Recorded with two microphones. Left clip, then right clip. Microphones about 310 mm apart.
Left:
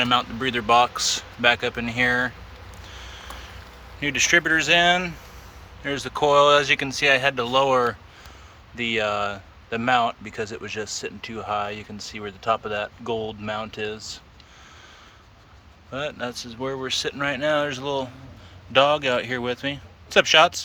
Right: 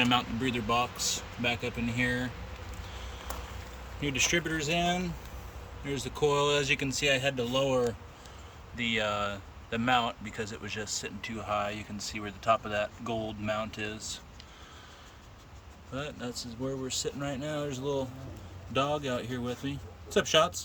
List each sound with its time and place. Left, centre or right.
0.0 s speech: centre
2.9 s a sound: centre
4.0 s speech: centre
8.7 s speech: centre
16.0 s speech: centre